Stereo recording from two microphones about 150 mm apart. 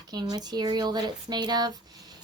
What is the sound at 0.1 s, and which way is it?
Speech, 25° right (ahead or behind).